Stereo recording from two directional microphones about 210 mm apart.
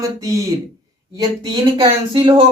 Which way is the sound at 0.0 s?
15° right (ahead or behind).